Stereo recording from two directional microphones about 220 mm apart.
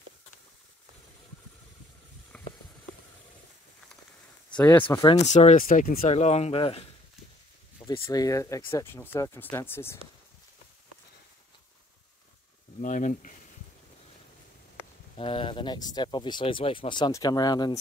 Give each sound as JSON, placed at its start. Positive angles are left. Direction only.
{"t": 2.3, "sound": "a sound", "side_deg": 5}
{"t": 4.6, "sound": "speech", "side_deg": 10}
{"t": 5.0, "sound": "speech", "side_deg": 20}
{"t": 5.3, "sound": "speech", "side_deg": 30}
{"t": 12.8, "sound": "speech", "side_deg": 35}
{"t": 15.1, "sound": "speech", "side_deg": 25}